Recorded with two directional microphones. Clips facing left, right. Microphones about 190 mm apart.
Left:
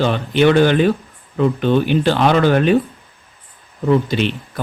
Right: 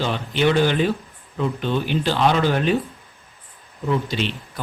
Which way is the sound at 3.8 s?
60° left (ahead or behind).